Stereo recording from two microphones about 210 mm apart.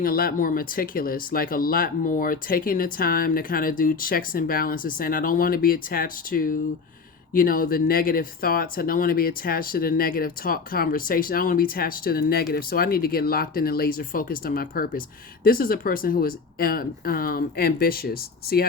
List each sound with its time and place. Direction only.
0.0 s speech: 45° left (ahead or behind)